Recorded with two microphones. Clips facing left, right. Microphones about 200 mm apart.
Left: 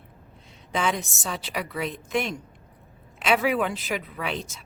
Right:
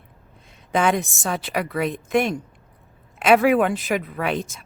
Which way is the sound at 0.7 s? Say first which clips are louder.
Right 6 dB; 55° right (ahead or behind).